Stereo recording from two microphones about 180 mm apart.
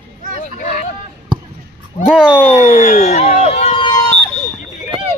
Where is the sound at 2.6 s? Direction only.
40° left (ahead or behind); by 4.1 s 25° left (ahead or behind).